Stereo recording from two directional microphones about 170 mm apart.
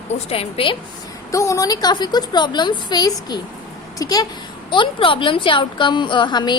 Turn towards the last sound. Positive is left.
turn(degrees=25)  # may be behind; listen again after turning